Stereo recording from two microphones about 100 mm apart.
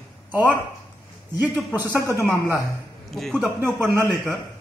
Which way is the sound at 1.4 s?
20° right (ahead or behind).